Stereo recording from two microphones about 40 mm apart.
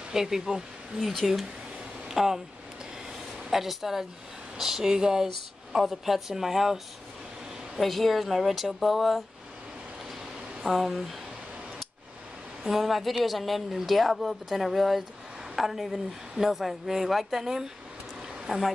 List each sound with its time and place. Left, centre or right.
0.1 s speech: centre
0.9 s a woman's voice: centre
2.0 s speech: centre
3.4 s speech: centre
7.8 s a woman's voice: centre
10.6 s a woman's voice: centre
12.6 s a woman's voice: centre
18.5 s speech: right